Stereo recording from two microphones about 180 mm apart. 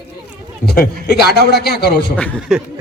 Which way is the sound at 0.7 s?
60° left (ahead or behind).